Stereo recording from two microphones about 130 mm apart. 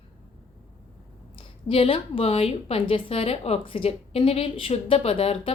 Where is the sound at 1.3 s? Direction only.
45° left (ahead or behind).